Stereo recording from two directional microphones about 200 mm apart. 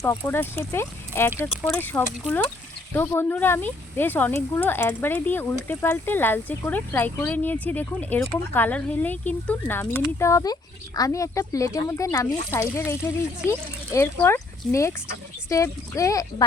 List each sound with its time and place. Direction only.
0.0 s speech: 15° left (ahead or behind)